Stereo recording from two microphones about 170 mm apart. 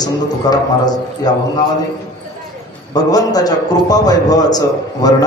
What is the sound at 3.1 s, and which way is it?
A man's voice, 20° left (ahead or behind).